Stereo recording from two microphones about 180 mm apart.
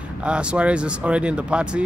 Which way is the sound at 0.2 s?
5° right (ahead or behind).